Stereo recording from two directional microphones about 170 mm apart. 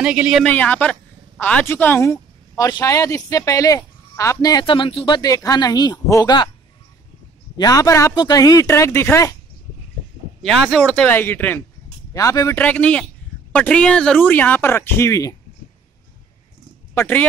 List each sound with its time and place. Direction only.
0.0 s speech: 5° right (ahead or behind)
0.5 s speech: 10° left (ahead or behind); by 6.5 s 25° left (ahead or behind)
7.5 s speech: 20° left (ahead or behind)
10.4 s speech: 5° left (ahead or behind); by 15.3 s 20° left (ahead or behind)
16.9 s speech: 10° left (ahead or behind)